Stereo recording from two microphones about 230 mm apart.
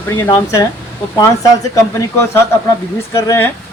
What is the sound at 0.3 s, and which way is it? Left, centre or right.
Speech, centre.